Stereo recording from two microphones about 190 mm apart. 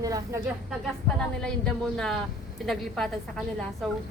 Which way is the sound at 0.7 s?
5° left (ahead or behind).